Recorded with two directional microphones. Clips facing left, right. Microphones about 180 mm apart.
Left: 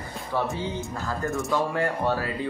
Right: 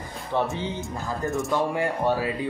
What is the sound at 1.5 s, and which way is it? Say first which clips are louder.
Speech: even; 15° right (ahead or behind).